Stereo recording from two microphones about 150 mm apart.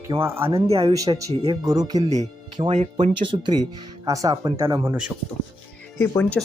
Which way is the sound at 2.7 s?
50° right (ahead or behind).